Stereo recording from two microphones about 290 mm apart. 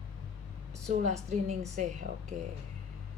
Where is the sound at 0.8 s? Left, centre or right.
Right.